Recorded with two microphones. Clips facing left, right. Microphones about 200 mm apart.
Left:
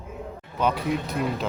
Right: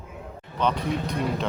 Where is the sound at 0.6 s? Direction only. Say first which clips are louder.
Left 1 dB; 5° left (ahead or behind).